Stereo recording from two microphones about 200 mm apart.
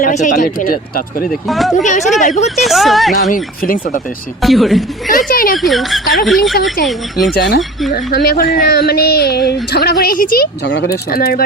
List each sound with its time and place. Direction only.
0.0 s speech: 40° left (ahead or behind)
1.3 s a woman's voice: centre (ahead or behind)
2.1 s speech: 35° left (ahead or behind)
2.6 s a woman's voice: centre (ahead or behind)
3.3 s speech: 45° left (ahead or behind)
4.4 s a woman's voice: centre (ahead or behind)
5.0 s speech: 45° left (ahead or behind)
5.5 s a woman's voice: centre (ahead or behind)
7.3 s speech: 55° left (ahead or behind)